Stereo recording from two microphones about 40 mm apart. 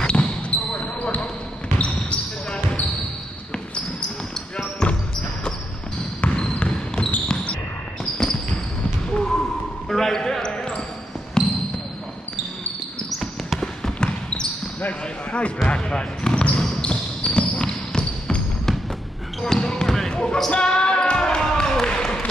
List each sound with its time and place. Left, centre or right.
0.0 s basketball bounce: left
4.8 s basketball bounce: left
6.3 s trickle: left
8.0 s basketball bounce: centre
13.6 s trickle: centre
15.3 s basketball bounce: left
19.4 s basketball bounce: centre